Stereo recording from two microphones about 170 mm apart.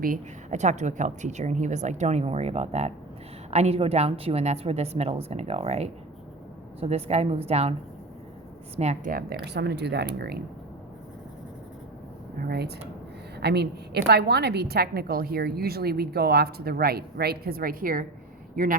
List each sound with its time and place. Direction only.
0.0 s a woman's voice: 50° right (ahead or behind)
9.1 s a woman's voice: 65° right (ahead or behind)
10.2 s speech: 65° right (ahead or behind)
12.4 s a woman's voice: 65° right (ahead or behind)